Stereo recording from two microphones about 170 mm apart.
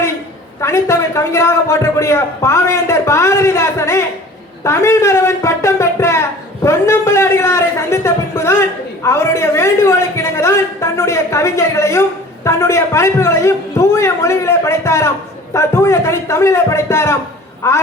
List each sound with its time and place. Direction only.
0.6 s speech: 15° left (ahead or behind)